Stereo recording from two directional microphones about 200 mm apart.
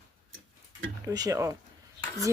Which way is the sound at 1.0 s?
15° right (ahead or behind).